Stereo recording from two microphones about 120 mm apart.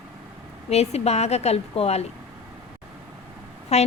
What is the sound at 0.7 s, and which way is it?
A woman's voice, 60° left (ahead or behind).